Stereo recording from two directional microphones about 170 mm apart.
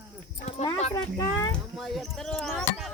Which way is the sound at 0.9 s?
20° left (ahead or behind).